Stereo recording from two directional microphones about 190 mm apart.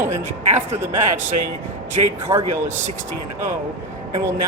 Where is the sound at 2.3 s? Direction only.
15° right (ahead or behind).